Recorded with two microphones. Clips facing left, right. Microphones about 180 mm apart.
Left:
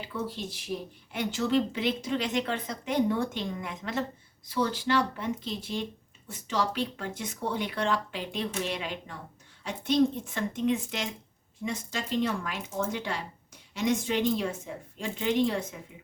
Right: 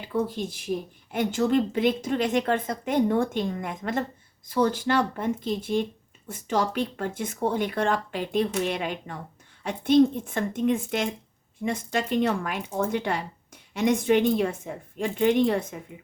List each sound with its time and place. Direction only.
0.1 s speech: 50° right (ahead or behind)